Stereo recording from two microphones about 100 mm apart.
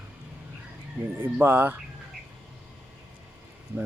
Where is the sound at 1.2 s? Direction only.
20° right (ahead or behind).